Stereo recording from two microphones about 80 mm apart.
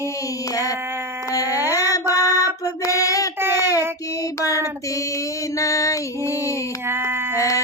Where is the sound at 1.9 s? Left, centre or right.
Left.